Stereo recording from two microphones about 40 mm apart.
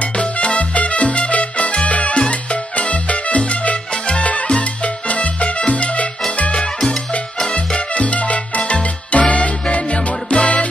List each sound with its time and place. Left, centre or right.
0.2 s music: left
6.6 s music: centre
7.5 s salsa music: left